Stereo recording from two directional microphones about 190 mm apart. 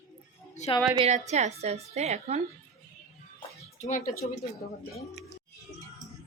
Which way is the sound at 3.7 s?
40° left (ahead or behind).